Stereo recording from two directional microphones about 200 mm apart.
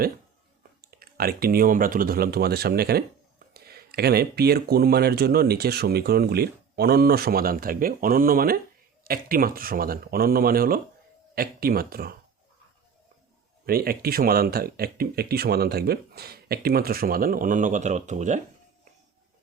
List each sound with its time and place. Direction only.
0.8 s speech: 50° right (ahead or behind)
13.7 s speech: 50° right (ahead or behind)